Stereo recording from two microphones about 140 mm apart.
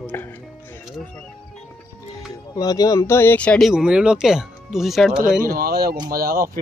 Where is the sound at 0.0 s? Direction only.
15° left (ahead or behind).